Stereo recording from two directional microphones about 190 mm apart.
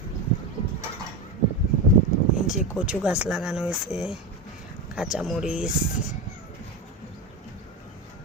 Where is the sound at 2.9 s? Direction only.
5° right (ahead or behind).